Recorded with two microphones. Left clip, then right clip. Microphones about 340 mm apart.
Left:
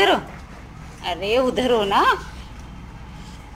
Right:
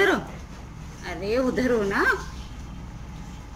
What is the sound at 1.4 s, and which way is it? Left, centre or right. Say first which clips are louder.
Speech: left 4 dB; left.